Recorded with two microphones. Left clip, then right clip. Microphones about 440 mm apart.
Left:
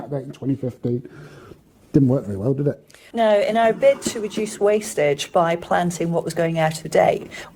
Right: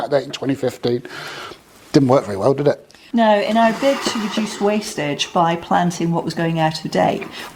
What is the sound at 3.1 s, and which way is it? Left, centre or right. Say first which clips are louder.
Speech: right 2 dB; left.